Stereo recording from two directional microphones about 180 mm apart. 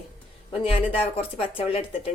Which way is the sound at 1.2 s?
30° left (ahead or behind).